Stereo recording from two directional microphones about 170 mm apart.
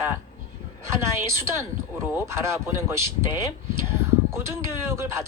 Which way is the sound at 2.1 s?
15° right (ahead or behind).